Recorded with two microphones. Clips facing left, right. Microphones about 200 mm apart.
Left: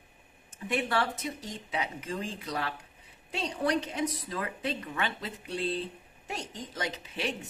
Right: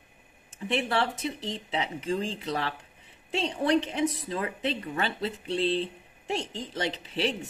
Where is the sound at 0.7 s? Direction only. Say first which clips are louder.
Right 2 dB; 25° right (ahead or behind).